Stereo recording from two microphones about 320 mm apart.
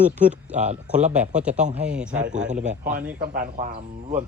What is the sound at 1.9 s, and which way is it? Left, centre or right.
Speech, centre.